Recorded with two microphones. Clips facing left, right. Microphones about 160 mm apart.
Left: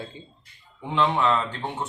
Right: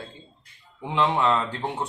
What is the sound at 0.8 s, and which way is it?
Speech, 5° right (ahead or behind).